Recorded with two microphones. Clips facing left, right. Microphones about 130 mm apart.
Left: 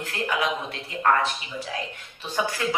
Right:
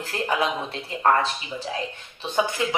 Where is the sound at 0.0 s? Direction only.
30° right (ahead or behind).